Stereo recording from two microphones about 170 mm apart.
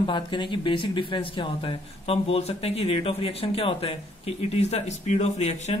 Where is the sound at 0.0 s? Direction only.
30° left (ahead or behind).